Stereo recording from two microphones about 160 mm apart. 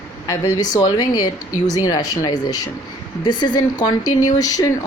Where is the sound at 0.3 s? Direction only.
20° left (ahead or behind).